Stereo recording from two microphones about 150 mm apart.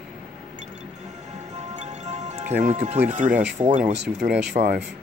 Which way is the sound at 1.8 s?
50° right (ahead or behind).